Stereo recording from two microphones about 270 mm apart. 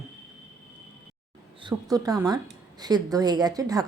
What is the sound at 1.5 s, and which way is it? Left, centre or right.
Speech, centre.